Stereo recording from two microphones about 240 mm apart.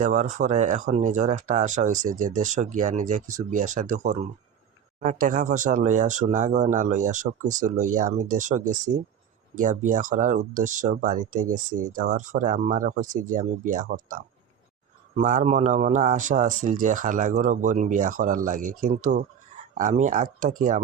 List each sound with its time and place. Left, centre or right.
0.0 s speech: right